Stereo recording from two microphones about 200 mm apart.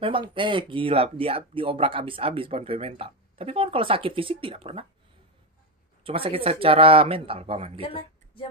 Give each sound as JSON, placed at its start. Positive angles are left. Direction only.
{"t": 0.0, "sound": "speech", "side_deg": -25}
{"t": 6.0, "sound": "speech", "side_deg": -25}
{"t": 7.8, "sound": "speech", "side_deg": 25}